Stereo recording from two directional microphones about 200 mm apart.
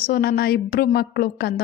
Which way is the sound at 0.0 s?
50° left (ahead or behind).